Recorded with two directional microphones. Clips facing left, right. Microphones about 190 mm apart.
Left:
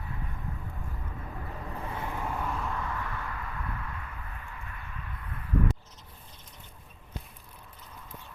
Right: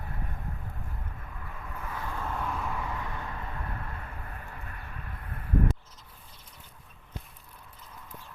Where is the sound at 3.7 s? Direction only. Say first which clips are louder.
Even; 40° right (ahead or behind).